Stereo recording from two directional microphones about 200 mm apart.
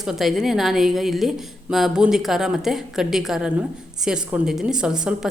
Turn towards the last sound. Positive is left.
turn(degrees=-5)  # may be behind; listen again after turning